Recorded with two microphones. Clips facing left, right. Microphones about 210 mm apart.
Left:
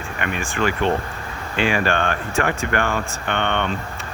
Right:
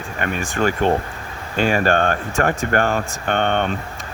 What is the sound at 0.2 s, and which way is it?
Speech, 40° right (ahead or behind).